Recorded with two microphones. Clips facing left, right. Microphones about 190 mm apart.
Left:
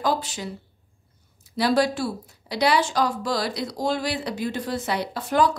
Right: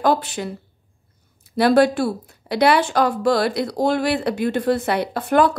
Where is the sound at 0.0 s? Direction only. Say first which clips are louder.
Right 6 dB; 60° right (ahead or behind).